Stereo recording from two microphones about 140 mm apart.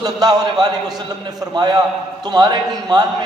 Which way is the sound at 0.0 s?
30° right (ahead or behind).